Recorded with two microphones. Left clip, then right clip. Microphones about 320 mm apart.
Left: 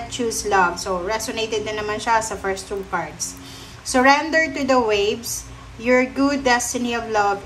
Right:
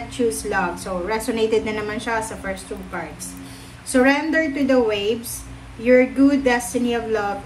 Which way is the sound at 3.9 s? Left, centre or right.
Centre.